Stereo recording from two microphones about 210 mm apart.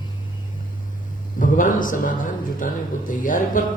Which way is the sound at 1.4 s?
40° left (ahead or behind).